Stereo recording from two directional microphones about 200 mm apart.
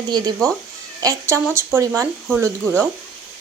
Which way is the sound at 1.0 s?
15° right (ahead or behind).